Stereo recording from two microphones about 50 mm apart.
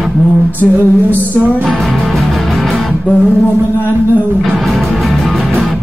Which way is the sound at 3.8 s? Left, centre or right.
Right.